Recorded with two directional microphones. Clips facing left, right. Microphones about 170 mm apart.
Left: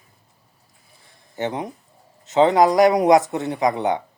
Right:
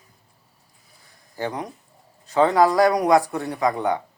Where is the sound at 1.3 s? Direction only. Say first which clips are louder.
Left 3 dB; 25° left (ahead or behind).